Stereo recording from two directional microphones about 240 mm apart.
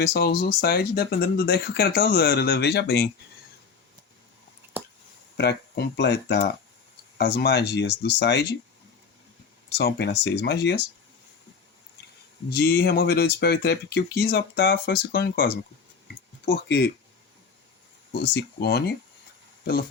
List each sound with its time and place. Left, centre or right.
0.0 s speech: left
5.4 s speech: left
9.6 s speech: left
12.5 s speech: left
18.1 s speech: left